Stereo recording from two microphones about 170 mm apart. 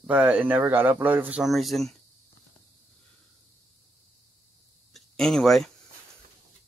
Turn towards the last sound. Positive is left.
turn(degrees=0)  # may be behind; listen again after turning